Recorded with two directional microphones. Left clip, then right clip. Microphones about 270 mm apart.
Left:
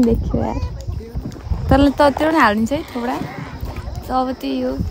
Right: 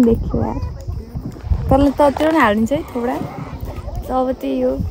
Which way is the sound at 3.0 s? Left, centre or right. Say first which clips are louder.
Right 2 dB; right.